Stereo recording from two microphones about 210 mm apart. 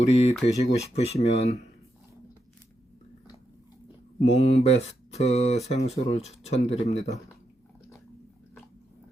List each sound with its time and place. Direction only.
0.0 s speech: 30° left (ahead or behind)
4.2 s speech: 30° left (ahead or behind)